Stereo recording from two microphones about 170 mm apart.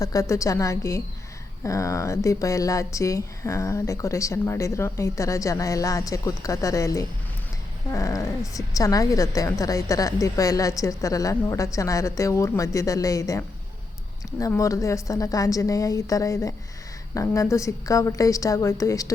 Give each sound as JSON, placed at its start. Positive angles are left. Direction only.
{"t": 0.0, "sound": "a woman's voice", "side_deg": 20}